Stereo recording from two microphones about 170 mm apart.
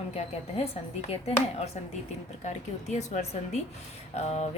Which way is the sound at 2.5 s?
45° left (ahead or behind).